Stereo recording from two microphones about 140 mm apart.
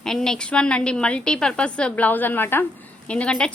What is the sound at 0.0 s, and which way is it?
A woman's voice, 5° left (ahead or behind).